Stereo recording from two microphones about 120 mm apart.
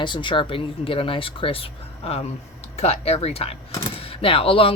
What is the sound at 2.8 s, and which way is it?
A woman's voice, 60° left (ahead or behind).